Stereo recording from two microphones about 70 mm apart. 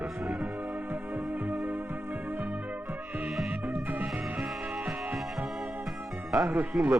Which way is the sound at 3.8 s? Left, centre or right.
Right.